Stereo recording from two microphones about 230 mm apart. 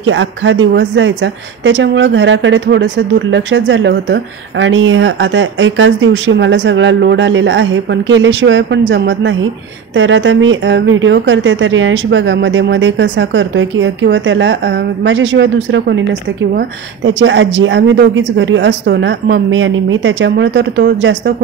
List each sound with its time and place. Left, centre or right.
0.0 s speech: right